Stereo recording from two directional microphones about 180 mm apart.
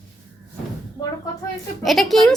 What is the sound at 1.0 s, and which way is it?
Speech, 20° left (ahead or behind).